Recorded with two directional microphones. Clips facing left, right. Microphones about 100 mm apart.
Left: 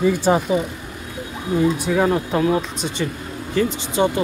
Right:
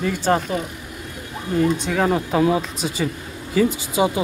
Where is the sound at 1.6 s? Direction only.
5° left (ahead or behind).